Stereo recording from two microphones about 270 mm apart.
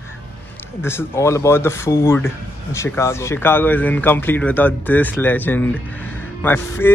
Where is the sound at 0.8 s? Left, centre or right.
Centre.